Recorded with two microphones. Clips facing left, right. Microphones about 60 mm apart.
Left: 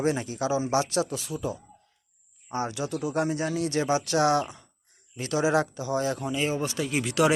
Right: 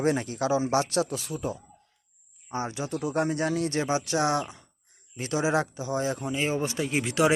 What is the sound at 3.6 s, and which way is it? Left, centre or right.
Speech, right.